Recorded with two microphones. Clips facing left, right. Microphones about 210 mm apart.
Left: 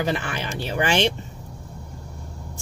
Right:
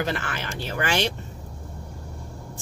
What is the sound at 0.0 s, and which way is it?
Speech, 15° left (ahead or behind).